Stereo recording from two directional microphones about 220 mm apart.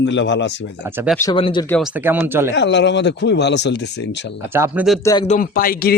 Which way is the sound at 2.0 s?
10° right (ahead or behind).